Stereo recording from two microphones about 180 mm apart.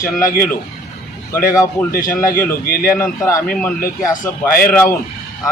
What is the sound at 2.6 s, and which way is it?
Speech, 55° left (ahead or behind).